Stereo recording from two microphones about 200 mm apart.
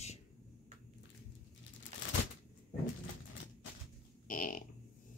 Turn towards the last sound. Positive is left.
turn(degrees=40)  # may be behind; listen again after turning